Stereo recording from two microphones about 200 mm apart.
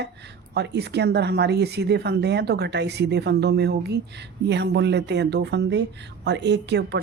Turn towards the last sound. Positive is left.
turn(degrees=-60)  # may be behind; listen again after turning